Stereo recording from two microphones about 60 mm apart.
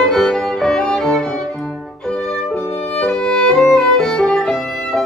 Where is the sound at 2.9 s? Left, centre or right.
Centre.